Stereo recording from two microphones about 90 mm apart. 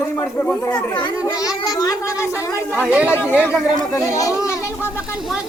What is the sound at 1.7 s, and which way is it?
Speech, 45° left (ahead or behind).